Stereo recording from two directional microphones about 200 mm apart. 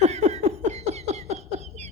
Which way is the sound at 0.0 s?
35° right (ahead or behind).